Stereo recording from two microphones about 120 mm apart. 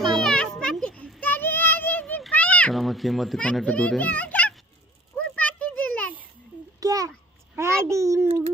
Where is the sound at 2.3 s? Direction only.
10° left (ahead or behind).